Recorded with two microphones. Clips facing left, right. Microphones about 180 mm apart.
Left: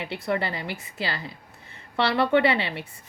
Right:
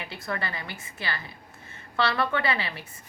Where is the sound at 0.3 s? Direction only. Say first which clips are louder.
Left 6 dB; 30° left (ahead or behind).